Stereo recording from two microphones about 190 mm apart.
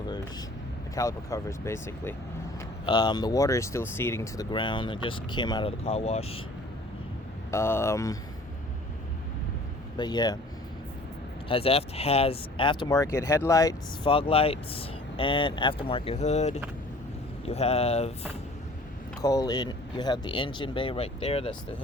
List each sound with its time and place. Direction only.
0.9 s speech: 15° left (ahead or behind)
4.5 s speech: 25° left (ahead or behind)
7.5 s speech: 15° left (ahead or behind)
10.0 s speech: 20° left (ahead or behind)
11.4 s speech: 30° left (ahead or behind)
14.1 s speech: 30° left (ahead or behind)
19.2 s speech: 20° left (ahead or behind)